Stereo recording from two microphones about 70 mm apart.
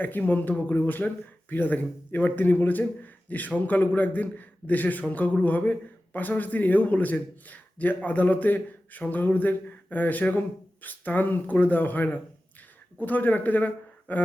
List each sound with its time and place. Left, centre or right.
0.0 s a man's voice: left